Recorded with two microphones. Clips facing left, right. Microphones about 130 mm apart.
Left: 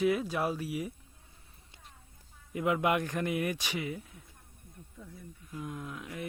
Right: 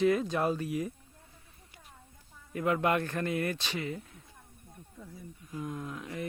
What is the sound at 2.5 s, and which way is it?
A man's voice, 15° left (ahead or behind).